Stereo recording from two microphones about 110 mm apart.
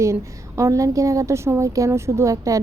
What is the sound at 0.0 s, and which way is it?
A woman's voice, 25° right (ahead or behind).